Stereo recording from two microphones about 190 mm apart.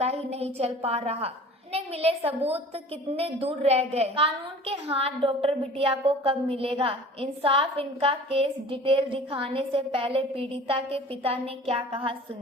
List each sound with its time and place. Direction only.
0.0 s a woman's voice: 35° right (ahead or behind)